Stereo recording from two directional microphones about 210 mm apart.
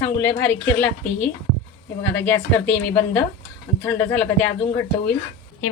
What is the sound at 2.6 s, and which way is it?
Speech, 55° left (ahead or behind).